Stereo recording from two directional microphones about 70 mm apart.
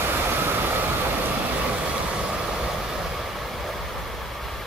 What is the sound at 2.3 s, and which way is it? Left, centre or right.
Vehicle, centre.